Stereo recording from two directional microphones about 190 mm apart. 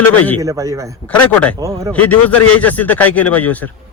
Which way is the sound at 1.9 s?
10° left (ahead or behind).